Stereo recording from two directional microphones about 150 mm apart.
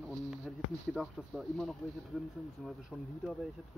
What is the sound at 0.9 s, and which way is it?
Speech, centre (ahead or behind).